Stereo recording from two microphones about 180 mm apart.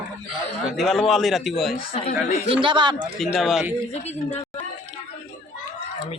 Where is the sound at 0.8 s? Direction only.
Centre (ahead or behind).